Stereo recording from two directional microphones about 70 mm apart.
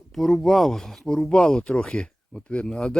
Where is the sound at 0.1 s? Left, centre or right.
Centre.